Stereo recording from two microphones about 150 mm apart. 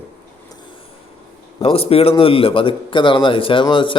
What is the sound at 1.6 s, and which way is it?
A man's voice, 40° left (ahead or behind).